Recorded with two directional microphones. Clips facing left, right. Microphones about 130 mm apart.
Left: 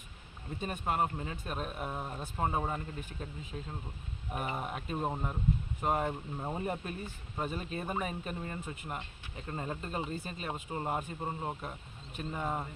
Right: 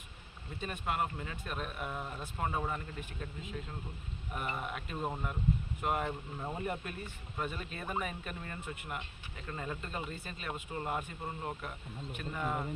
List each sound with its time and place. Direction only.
0.6 s speech: 35° left (ahead or behind)
4.3 s speech: 40° left (ahead or behind)
5.0 s speech: 25° left (ahead or behind)